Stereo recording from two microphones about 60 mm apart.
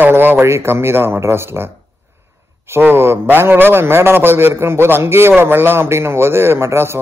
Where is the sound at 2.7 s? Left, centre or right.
Right.